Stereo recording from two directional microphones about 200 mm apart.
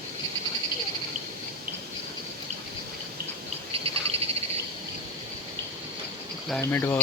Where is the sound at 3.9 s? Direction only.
30° right (ahead or behind).